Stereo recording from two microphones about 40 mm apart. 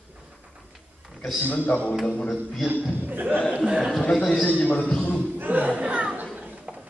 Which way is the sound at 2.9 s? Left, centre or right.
Right.